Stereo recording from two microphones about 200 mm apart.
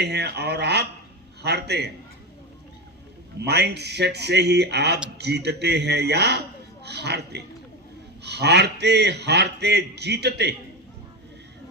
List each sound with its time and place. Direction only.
0.0 s a man's voice: 55° right (ahead or behind)
3.4 s a man's voice: 55° right (ahead or behind)